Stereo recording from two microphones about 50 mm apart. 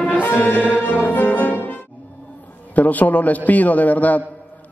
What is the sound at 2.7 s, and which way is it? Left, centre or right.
A man's voice, left.